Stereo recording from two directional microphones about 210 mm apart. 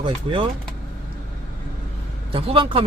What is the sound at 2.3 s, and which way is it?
Speech, 25° right (ahead or behind).